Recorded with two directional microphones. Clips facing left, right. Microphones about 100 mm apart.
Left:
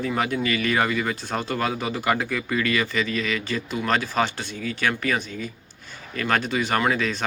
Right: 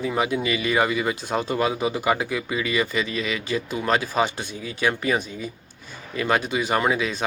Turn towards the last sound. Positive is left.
turn(degrees=-10)  # may be behind; listen again after turning